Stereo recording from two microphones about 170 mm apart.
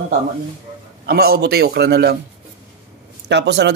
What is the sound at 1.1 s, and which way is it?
Speech, 65° right (ahead or behind).